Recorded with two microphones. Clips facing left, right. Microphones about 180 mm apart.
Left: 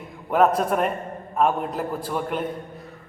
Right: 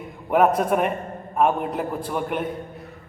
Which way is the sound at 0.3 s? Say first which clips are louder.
Right 1 dB; 5° right (ahead or behind).